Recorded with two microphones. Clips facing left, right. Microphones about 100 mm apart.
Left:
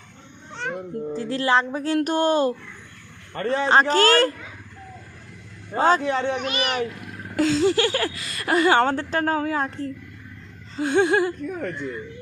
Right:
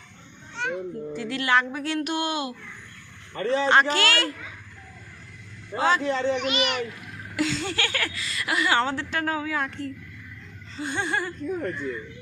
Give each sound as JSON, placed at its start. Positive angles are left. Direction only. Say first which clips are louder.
{"t": 0.6, "sound": "a sound", "louder": "left 1 dB", "side_deg": 40}
{"t": 2.0, "sound": "a man's voice", "louder": "left 8 dB", "side_deg": 40}
{"t": 3.7, "sound": "speech", "louder": "left 6 dB", "side_deg": 35}
{"t": 5.7, "sound": "a man's voice", "louder": "left 4 dB", "side_deg": 40}
{"t": 6.1, "sound": "a child's voice", "louder": "left 1 dB", "side_deg": 60}
{"t": 6.3, "sound": "speech", "louder": "left 1 dB", "side_deg": 40}
{"t": 8.8, "sound": "a man's voice", "louder": "left 5 dB", "side_deg": 50}
{"t": 9.0, "sound": "speech", "louder": "left 5 dB", "side_deg": 40}
{"t": 10.8, "sound": "speech", "louder": "left 9 dB", "side_deg": 60}